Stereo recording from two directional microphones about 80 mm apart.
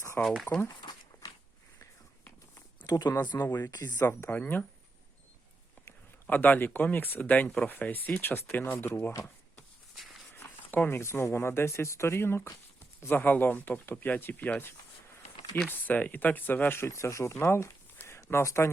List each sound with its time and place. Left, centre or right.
0.2 s speech: left
0.8 s walk: left
2.8 s speech: left
4.0 s speech: left
4.4 s speech: left
6.2 s speech: left
9.9 s a sound: centre
10.3 s speech: left
17.9 s a sound: left